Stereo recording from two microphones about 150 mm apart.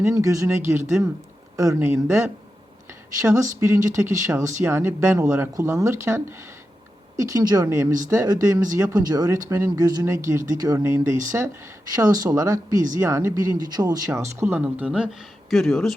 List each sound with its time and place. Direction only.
0.0 s speech: 20° right (ahead or behind); by 16.0 s centre (ahead or behind)